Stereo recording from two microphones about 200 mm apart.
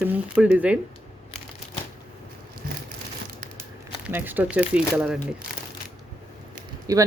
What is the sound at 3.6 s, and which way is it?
Speech, 10° right (ahead or behind).